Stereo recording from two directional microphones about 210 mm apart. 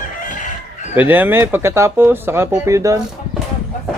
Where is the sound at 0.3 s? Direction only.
35° left (ahead or behind).